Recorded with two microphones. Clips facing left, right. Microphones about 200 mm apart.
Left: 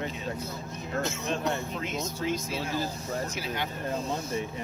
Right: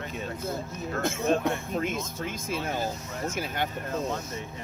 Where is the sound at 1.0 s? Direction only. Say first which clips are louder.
Right 5 dB; 50° right (ahead or behind).